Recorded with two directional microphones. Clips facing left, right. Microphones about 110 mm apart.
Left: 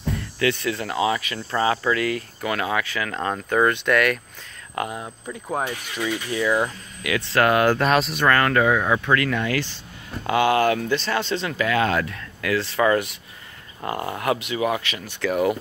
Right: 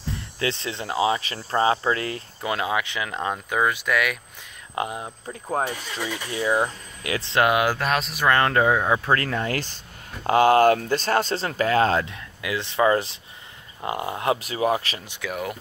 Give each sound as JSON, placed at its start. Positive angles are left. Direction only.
{"t": 0.1, "sound": "speech", "side_deg": -25}
{"t": 4.7, "sound": "speech", "side_deg": -20}
{"t": 6.3, "sound": "speech", "side_deg": -25}
{"t": 8.3, "sound": "speech", "side_deg": -25}
{"t": 9.0, "sound": "speech", "side_deg": -35}
{"t": 15.0, "sound": "speech", "side_deg": -15}